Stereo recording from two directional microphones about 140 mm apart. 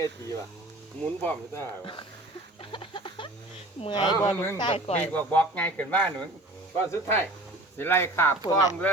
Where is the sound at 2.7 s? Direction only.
35° left (ahead or behind).